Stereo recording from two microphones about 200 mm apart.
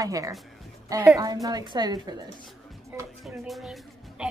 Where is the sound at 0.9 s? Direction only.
15° right (ahead or behind).